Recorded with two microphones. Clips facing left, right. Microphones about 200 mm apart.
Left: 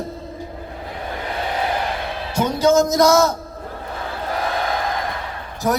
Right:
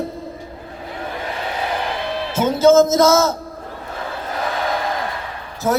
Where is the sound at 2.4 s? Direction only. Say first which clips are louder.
Right 4 dB; 15° left (ahead or behind).